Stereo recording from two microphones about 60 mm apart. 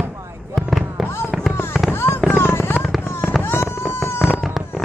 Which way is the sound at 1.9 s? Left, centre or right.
Left.